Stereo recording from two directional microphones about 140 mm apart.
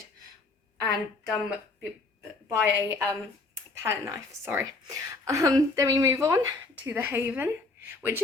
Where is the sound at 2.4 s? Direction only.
20° right (ahead or behind).